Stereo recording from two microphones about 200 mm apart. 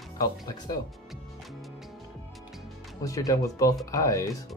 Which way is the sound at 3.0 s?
15° left (ahead or behind).